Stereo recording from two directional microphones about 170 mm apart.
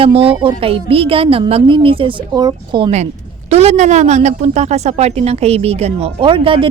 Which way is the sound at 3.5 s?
40° right (ahead or behind).